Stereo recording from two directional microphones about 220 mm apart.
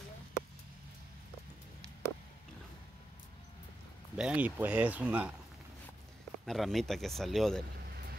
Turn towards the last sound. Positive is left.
turn(degrees=0)  # may be behind; listen again after turning